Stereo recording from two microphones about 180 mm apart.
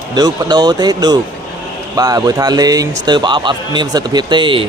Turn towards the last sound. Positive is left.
turn(degrees=-25)  # may be behind; listen again after turning